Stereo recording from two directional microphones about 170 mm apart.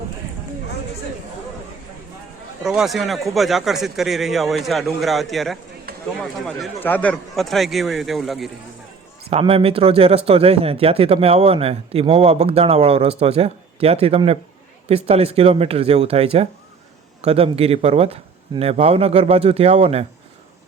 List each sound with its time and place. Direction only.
2.6 s a man's voice: centre (ahead or behind)
9.3 s speech: 35° right (ahead or behind)